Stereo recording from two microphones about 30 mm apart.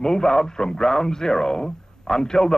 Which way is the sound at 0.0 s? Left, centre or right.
Left.